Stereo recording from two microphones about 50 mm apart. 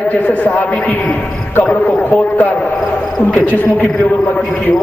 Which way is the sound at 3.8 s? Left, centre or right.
Left.